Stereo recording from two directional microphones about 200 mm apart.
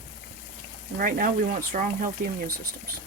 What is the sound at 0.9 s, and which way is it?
Speech, 45° right (ahead or behind).